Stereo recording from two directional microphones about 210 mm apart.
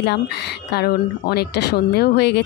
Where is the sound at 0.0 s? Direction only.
50° left (ahead or behind).